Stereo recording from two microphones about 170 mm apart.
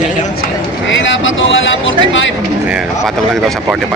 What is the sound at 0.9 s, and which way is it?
Speech, 90° left.